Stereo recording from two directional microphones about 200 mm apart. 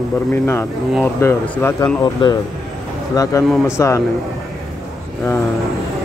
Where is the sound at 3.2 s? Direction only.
15° left (ahead or behind).